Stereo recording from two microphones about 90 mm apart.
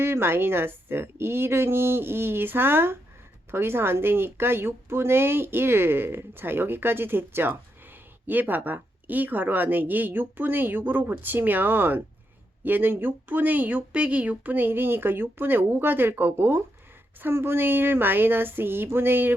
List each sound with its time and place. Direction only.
0.0 s speech: 25° right (ahead or behind)